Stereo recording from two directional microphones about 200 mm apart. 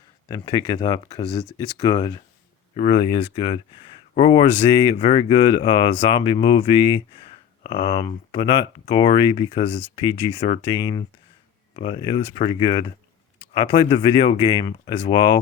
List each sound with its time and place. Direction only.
0.3 s speech: 20° left (ahead or behind)